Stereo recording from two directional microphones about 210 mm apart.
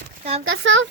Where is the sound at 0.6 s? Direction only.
60° right (ahead or behind).